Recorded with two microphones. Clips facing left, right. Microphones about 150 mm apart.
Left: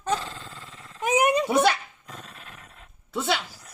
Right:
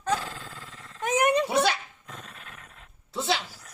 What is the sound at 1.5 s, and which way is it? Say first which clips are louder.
Speech: left 3 dB; 55° left (ahead or behind).